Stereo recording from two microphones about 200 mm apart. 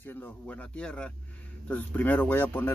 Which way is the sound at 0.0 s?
10° left (ahead or behind).